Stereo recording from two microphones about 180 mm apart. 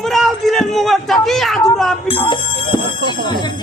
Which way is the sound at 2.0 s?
30° left (ahead or behind).